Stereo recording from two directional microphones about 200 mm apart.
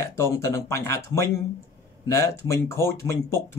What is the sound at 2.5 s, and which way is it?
Speech, 15° left (ahead or behind).